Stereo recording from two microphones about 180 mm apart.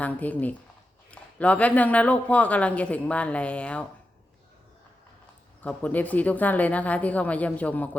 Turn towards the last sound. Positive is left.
turn(degrees=10)  # may be behind; listen again after turning